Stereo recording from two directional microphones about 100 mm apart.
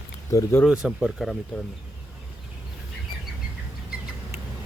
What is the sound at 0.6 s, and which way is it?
Speech, 5° right (ahead or behind).